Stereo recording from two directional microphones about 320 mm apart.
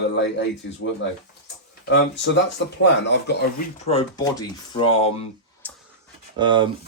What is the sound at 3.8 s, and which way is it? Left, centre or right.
Speech, centre.